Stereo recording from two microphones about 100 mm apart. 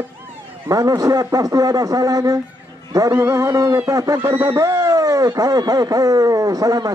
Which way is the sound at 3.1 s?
25° right (ahead or behind).